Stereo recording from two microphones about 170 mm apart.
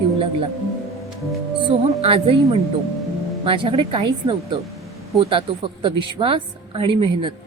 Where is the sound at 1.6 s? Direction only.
35° right (ahead or behind).